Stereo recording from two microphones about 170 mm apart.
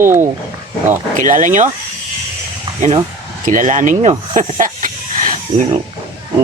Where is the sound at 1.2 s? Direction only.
50° right (ahead or behind).